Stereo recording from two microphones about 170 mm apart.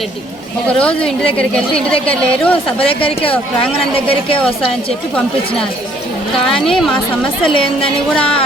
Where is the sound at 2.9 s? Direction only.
35° left (ahead or behind).